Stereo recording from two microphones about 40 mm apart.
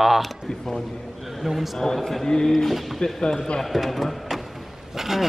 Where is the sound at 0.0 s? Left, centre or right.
Centre.